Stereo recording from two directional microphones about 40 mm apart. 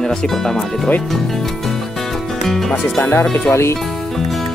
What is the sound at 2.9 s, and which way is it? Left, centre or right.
Speech, left.